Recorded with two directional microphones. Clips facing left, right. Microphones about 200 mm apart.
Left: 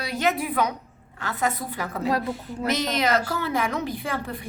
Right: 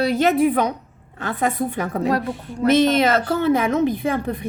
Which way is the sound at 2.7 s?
25° right (ahead or behind).